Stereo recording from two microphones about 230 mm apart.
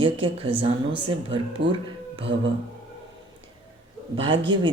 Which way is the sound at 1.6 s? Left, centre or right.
Right.